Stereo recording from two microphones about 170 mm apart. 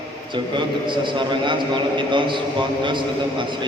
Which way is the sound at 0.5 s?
30° right (ahead or behind).